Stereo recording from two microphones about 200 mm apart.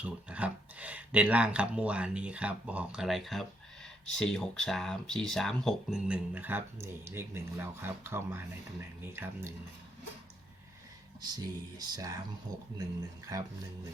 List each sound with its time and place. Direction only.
0.0 s speech: 5° right (ahead or behind)
11.2 s speech: 20° right (ahead or behind)
13.3 s speech: 15° right (ahead or behind)